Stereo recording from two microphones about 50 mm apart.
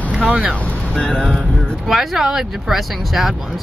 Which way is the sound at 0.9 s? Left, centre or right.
Centre.